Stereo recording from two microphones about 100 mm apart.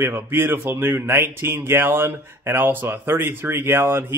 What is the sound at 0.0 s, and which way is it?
Speech, 20° right (ahead or behind).